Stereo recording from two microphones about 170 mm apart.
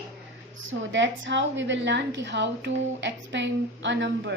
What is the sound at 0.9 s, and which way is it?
A woman's voice, 90° right.